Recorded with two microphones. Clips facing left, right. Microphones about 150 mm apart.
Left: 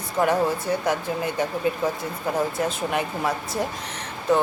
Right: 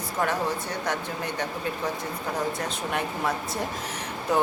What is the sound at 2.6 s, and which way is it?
Speech, 5° left (ahead or behind).